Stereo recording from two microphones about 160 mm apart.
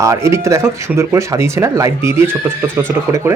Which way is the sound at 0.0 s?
20° right (ahead or behind).